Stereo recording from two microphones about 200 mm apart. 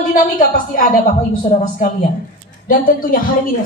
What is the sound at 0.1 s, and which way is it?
A woman's voice, 45° left (ahead or behind).